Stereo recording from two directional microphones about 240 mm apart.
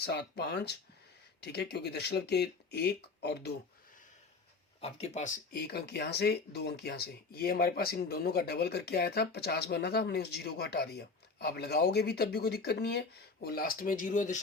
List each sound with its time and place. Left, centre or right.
0.0 s speech: left
4.8 s speech: left